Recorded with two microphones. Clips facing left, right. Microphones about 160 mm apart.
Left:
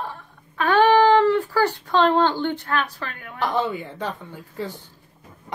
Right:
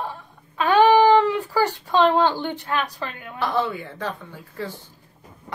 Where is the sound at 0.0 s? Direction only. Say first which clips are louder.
Right 1 dB; 15° right (ahead or behind).